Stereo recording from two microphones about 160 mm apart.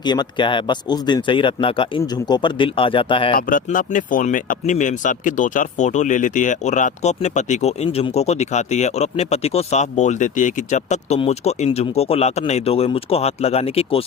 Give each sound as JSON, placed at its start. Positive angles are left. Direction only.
{"t": 0.0, "sound": "speech", "side_deg": 25}
{"t": 3.3, "sound": "speech", "side_deg": 60}